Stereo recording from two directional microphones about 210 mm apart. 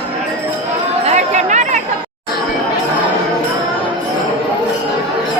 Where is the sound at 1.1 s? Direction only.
35° right (ahead or behind).